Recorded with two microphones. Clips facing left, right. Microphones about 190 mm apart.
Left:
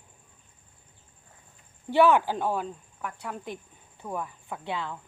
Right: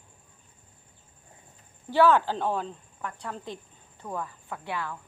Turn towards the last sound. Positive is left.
turn(degrees=20)  # may be behind; listen again after turning